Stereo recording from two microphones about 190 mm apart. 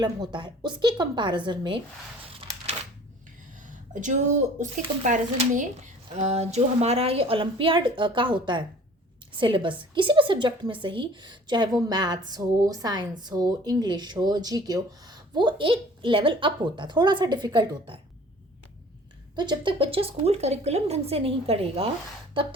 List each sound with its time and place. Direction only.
0.0 s speech: 20° right (ahead or behind)
2.2 s a sound: 30° right (ahead or behind)
3.6 s speech: 40° right (ahead or behind); by 18.0 s 25° right (ahead or behind)
19.4 s speech: 25° right (ahead or behind)